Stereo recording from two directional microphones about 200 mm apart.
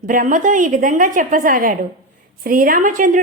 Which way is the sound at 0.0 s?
40° right (ahead or behind).